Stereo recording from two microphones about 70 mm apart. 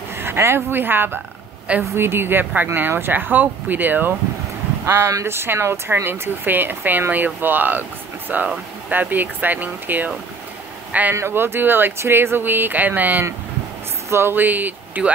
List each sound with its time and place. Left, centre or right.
0.1 s a woman's voice: right
4.8 s speech: right
11.1 s speech: right